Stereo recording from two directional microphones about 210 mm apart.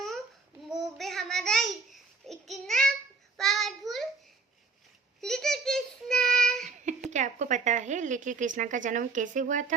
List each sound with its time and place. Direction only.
0.7 s babbling: centre (ahead or behind)
3.3 s child singing: centre (ahead or behind)
5.2 s child singing: centre (ahead or behind)
6.7 s a sound: 35° right (ahead or behind)